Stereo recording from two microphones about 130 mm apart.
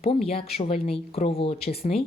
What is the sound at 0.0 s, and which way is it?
Speech, 50° left (ahead or behind).